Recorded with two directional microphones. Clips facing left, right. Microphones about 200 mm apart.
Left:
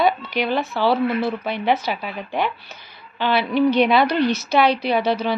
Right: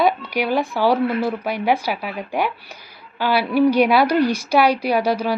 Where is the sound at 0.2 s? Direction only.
10° right (ahead or behind).